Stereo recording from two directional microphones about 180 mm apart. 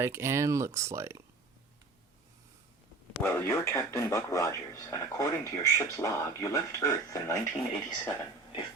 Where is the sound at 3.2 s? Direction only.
15° left (ahead or behind).